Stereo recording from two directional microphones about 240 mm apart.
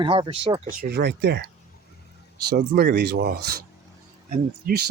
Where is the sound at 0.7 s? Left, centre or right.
Right.